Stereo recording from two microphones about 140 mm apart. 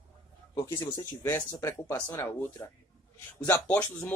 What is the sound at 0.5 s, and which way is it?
Speech, 20° left (ahead or behind).